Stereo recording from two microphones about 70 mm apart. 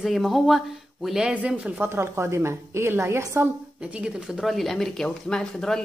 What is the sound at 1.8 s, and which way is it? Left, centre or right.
A woman's voice, right.